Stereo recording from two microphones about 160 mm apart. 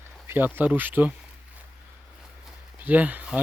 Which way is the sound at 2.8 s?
10° right (ahead or behind).